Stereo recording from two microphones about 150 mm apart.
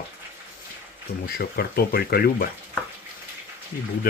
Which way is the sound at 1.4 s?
90° left.